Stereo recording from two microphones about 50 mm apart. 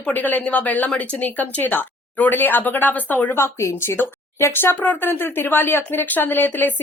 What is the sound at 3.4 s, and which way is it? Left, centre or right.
Speech, left.